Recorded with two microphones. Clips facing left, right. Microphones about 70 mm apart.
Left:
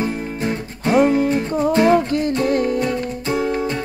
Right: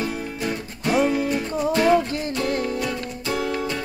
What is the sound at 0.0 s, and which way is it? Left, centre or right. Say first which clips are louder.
Music: left 4 dB; left.